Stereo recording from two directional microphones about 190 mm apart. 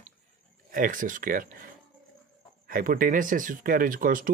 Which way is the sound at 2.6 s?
45° right (ahead or behind).